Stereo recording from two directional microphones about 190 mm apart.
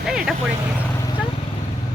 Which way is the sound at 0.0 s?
Centre (ahead or behind).